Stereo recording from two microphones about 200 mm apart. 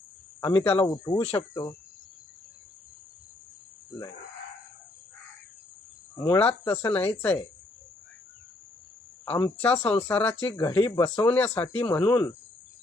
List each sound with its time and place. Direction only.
0.4 s speech: 10° left (ahead or behind)
1.2 s speech: 30° left (ahead or behind)
6.2 s speech: 10° left (ahead or behind)
9.2 s speech: 10° left (ahead or behind)